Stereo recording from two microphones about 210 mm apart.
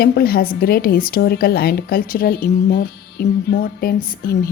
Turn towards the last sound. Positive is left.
turn(degrees=45)  # may be behind; listen again after turning